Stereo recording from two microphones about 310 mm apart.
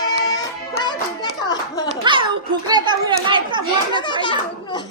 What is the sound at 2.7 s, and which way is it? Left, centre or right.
Children playing, centre.